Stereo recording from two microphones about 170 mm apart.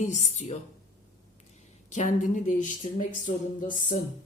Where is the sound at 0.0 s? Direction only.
45° left (ahead or behind).